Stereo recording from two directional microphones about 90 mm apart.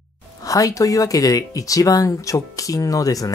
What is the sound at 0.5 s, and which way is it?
Speech, 40° left (ahead or behind).